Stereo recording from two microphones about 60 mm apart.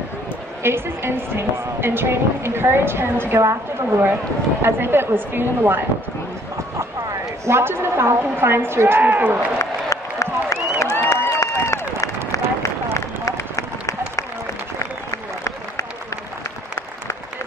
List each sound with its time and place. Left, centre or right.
0.6 s a woman's voice: right
7.4 s a woman's voice: right
9.0 s a man's voice: right
9.6 s applause: left
11.1 s a sound: left
12.6 s run: left